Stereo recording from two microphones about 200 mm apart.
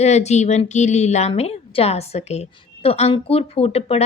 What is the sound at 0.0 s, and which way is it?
A woman's voice, 35° left (ahead or behind).